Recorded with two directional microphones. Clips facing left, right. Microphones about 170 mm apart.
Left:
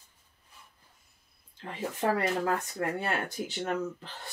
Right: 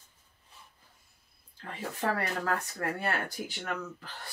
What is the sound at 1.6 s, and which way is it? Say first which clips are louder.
Speech: left 3 dB; 20° left (ahead or behind).